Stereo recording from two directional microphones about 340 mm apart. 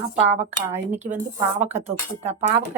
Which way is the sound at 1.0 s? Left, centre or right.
Centre.